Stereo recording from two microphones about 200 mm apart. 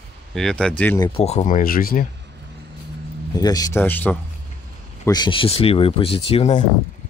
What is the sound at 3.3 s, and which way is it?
Speech, 20° left (ahead or behind).